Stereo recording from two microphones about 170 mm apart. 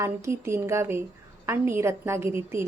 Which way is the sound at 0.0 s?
15° right (ahead or behind).